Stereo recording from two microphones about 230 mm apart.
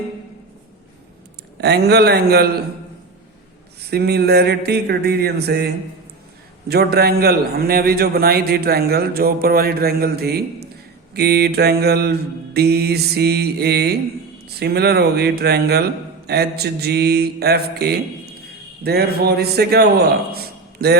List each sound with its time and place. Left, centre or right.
1.6 s a man's voice: right
3.8 s a man's voice: right